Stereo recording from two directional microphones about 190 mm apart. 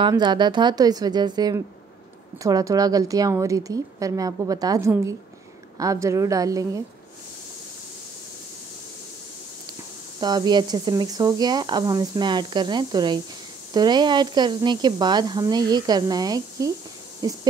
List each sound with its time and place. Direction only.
0.0 s a woman's voice: 25° right (ahead or behind)
10.2 s speech: 20° right (ahead or behind)